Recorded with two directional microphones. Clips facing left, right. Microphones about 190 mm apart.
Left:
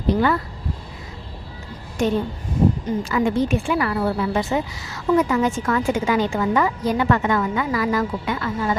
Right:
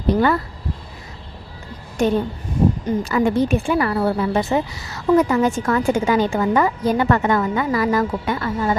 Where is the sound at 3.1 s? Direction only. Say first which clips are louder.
Right 2 dB; 40° right (ahead or behind).